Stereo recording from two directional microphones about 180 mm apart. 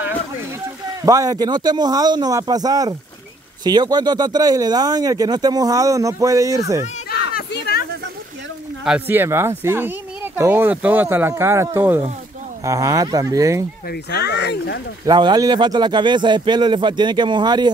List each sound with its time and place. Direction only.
1.0 s speech: 20° right (ahead or behind)
7.1 s a sound: 60° left (ahead or behind)
8.8 s speech: 10° right (ahead or behind)
13.8 s speech: 65° left (ahead or behind)
15.0 s speech: 25° right (ahead or behind)